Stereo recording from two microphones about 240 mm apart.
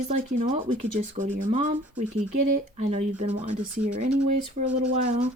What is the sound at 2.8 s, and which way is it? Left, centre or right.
Speech, right.